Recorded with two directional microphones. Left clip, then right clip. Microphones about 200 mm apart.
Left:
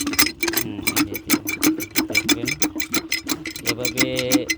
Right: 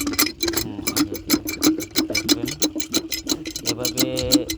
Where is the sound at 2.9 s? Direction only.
10° left (ahead or behind).